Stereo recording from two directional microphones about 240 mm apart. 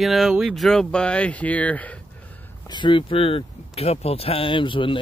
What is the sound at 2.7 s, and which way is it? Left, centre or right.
Speech, centre.